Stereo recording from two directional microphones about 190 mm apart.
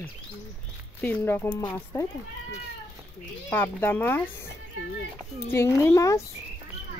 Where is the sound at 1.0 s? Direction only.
10° left (ahead or behind).